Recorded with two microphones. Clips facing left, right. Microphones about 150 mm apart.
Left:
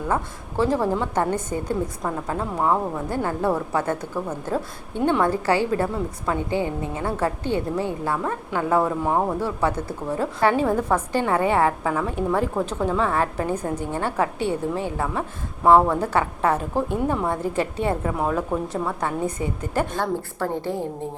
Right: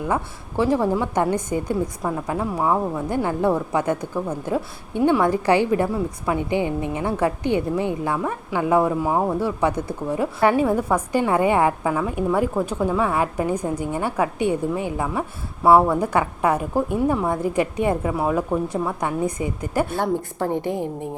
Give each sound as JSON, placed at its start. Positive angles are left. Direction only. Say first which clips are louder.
{"t": 0.1, "sound": "a woman's voice", "louder": "right 1 dB", "side_deg": -15}